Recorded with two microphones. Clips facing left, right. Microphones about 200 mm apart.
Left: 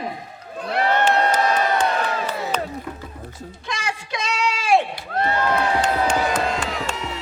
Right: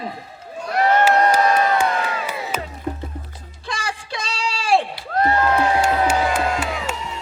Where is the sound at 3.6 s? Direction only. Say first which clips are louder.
Right 1 dB; 30° right (ahead or behind).